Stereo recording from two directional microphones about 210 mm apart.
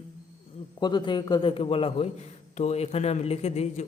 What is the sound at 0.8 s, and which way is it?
A man's voice, 20° left (ahead or behind).